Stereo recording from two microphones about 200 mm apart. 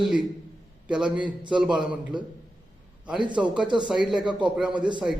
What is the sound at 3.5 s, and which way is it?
Speech, 5° right (ahead or behind).